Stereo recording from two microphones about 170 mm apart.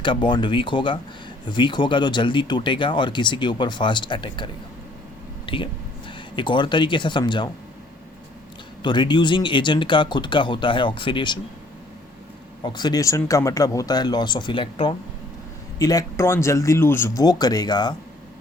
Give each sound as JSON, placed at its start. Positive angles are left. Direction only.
{"t": 0.0, "sound": "speech", "side_deg": 30}
{"t": 8.8, "sound": "speech", "side_deg": 25}
{"t": 12.6, "sound": "speech", "side_deg": 25}